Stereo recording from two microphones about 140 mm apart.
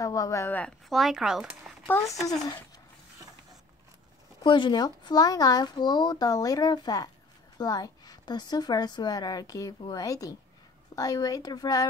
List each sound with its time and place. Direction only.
0.0 s speech: 25° left (ahead or behind); by 1.5 s 5° right (ahead or behind)
1.9 s speech: 15° left (ahead or behind)
4.4 s a woman's voice: 35° left (ahead or behind)